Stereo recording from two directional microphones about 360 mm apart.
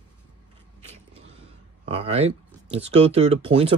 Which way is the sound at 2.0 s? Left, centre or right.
Centre.